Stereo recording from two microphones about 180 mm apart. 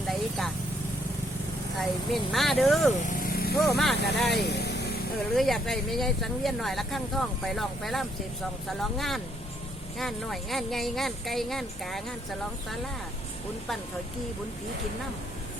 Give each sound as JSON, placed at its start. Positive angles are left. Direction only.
{"t": 0.1, "sound": "vehicle", "side_deg": 0}
{"t": 1.8, "sound": "speech", "side_deg": 0}
{"t": 3.1, "sound": "vehicle", "side_deg": 55}
{"t": 3.6, "sound": "speech", "side_deg": 0}
{"t": 4.4, "sound": "vehicle", "side_deg": 65}
{"t": 5.3, "sound": "speech", "side_deg": 0}